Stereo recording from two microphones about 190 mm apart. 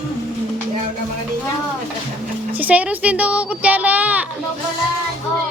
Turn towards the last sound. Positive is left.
turn(degrees=-10)  # may be behind; listen again after turning